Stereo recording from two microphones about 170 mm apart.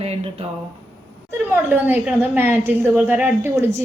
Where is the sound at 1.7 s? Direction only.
10° right (ahead or behind).